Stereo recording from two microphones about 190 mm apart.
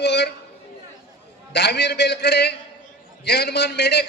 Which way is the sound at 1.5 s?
60° left (ahead or behind).